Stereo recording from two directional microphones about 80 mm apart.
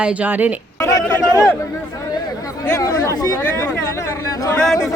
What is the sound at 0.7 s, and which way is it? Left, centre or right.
Speech, left.